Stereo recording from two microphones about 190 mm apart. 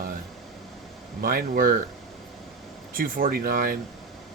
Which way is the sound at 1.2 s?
50° right (ahead or behind).